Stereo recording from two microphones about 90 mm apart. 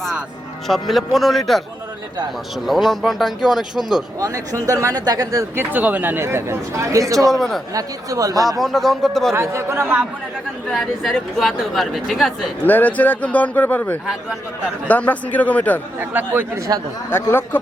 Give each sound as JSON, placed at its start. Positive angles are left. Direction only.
{"t": 0.7, "sound": "speech", "side_deg": 0}
{"t": 2.6, "sound": "speech", "side_deg": 0}
{"t": 4.2, "sound": "speech", "side_deg": -40}
{"t": 5.5, "sound": "speech", "side_deg": -20}
{"t": 8.4, "sound": "speech", "side_deg": 0}
{"t": 9.3, "sound": "speech", "side_deg": -30}
{"t": 10.7, "sound": "speech", "side_deg": 0}
{"t": 12.6, "sound": "a man's voice", "side_deg": 20}
{"t": 16.0, "sound": "speech", "side_deg": -25}
{"t": 17.1, "sound": "speech", "side_deg": 25}